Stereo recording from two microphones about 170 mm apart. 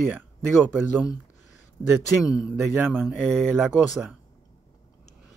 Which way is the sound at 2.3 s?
5° right (ahead or behind).